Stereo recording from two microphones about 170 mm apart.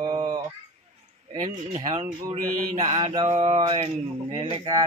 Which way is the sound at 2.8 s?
40° right (ahead or behind).